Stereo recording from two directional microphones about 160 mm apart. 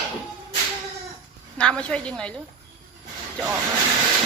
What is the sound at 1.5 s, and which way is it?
Speech, 5° left (ahead or behind).